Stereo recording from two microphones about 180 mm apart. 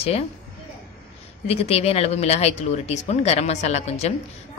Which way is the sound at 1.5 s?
35° left (ahead or behind).